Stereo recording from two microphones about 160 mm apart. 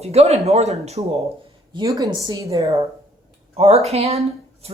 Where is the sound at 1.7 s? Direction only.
25° right (ahead or behind).